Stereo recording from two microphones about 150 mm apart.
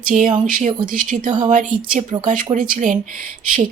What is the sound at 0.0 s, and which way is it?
Speech, 60° right (ahead or behind).